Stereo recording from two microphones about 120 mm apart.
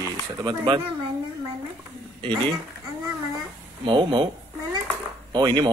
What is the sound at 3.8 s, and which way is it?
Speech, 45° right (ahead or behind).